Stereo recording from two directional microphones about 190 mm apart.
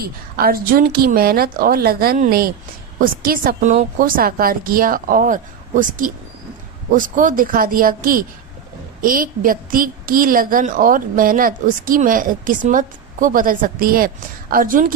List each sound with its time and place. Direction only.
0.0 s a woman's voice: 50° right (ahead or behind)